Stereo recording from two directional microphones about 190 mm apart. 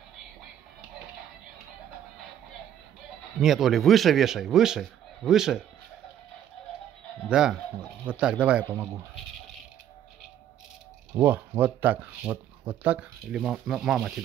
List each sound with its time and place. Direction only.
3.3 s a man's voice: centre (ahead or behind)
7.2 s a man's voice: 5° right (ahead or behind)
11.1 s speech: 10° right (ahead or behind)